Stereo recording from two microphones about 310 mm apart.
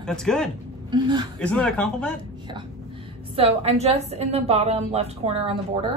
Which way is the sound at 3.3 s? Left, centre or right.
Centre.